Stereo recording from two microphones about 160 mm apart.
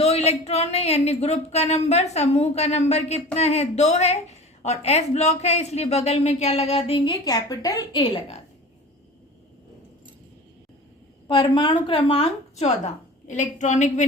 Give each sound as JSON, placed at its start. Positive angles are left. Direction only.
{"t": 0.0, "sound": "a woman's voice", "side_deg": 40}
{"t": 11.3, "sound": "speech", "side_deg": 30}